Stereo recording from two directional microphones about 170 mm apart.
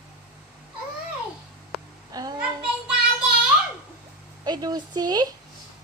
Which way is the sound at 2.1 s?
20° right (ahead or behind).